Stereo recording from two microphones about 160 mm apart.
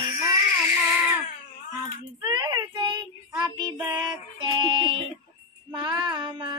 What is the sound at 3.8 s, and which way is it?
Music, 25° right (ahead or behind).